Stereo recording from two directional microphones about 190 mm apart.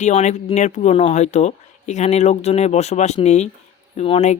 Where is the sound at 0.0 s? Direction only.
40° left (ahead or behind).